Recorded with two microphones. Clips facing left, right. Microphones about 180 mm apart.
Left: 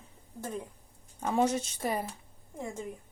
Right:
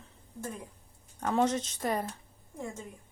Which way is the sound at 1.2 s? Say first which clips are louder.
Even; 10° left (ahead or behind).